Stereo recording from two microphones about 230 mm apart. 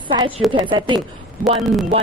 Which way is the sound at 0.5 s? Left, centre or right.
Right.